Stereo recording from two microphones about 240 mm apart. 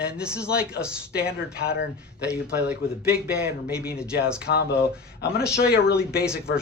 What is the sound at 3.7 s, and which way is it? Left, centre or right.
Speech, left.